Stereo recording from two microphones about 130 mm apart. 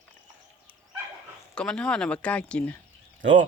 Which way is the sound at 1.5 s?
5° left (ahead or behind).